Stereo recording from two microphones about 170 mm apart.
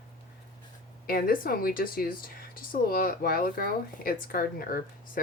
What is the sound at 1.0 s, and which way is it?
A woman's voice, 60° left (ahead or behind).